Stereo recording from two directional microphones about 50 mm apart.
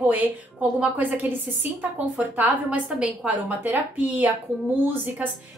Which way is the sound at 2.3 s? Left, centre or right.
Right.